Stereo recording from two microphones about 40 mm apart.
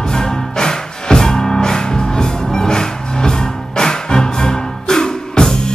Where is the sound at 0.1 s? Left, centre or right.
Centre.